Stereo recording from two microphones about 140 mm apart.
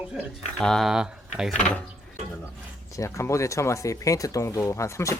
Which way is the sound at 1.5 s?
10° left (ahead or behind).